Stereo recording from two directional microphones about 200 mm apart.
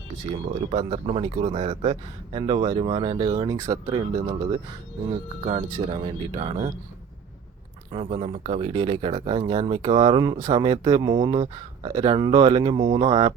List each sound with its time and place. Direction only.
0.3 s speech: 30° right (ahead or behind)
5.5 s speech: 30° right (ahead or behind)
7.9 s speech: 30° right (ahead or behind)